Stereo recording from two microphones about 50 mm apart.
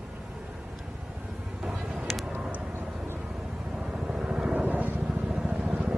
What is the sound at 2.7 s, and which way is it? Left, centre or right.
Vehicle, right.